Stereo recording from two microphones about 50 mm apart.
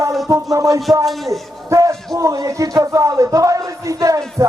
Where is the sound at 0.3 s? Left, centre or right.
Right.